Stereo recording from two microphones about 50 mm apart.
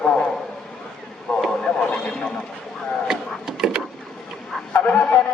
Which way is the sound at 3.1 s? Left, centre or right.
Centre.